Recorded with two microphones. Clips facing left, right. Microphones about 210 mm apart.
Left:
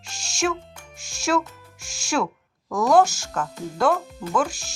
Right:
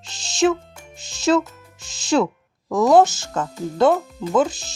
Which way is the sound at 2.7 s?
20° right (ahead or behind).